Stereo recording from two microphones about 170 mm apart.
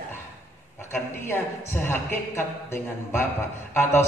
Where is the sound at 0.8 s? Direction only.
15° left (ahead or behind).